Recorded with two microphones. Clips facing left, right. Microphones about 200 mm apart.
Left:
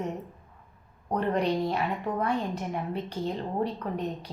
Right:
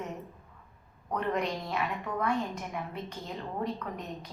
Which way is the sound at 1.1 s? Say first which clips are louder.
Left 5 dB; 35° left (ahead or behind).